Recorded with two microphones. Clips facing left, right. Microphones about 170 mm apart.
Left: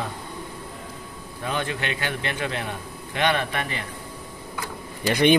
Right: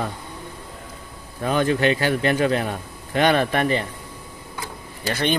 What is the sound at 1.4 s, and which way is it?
Speech, 40° right (ahead or behind).